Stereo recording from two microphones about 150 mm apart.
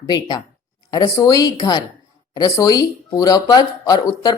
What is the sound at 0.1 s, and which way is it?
A woman's voice, 30° left (ahead or behind).